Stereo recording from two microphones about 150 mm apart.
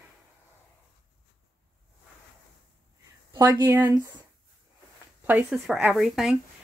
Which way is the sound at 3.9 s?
25° right (ahead or behind).